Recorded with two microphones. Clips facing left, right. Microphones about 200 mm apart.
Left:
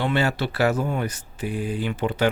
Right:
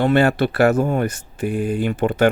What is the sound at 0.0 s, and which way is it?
Speech, 55° right (ahead or behind).